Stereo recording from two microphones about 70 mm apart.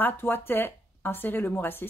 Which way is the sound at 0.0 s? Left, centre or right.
Left.